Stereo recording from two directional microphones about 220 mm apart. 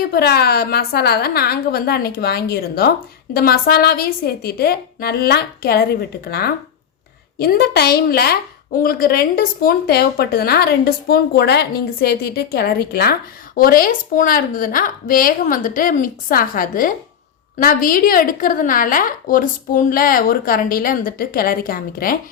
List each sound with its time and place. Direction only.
0.1 s a woman's voice: 45° left (ahead or behind)